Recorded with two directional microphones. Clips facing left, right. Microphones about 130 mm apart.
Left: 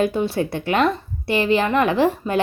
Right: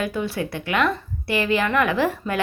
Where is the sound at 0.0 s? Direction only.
25° left (ahead or behind).